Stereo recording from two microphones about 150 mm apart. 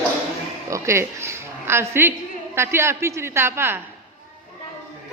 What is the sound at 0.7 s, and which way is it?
A woman's voice, 20° right (ahead or behind).